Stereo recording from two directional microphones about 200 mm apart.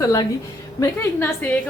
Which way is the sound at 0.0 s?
15° left (ahead or behind).